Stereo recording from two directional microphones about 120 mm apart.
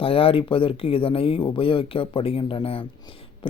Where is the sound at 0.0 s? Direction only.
50° left (ahead or behind).